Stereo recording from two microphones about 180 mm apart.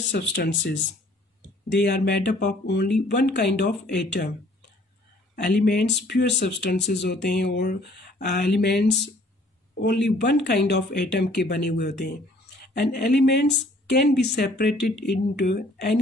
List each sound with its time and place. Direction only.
0.1 s speech: 75° left (ahead or behind)
5.3 s speech: 60° left (ahead or behind)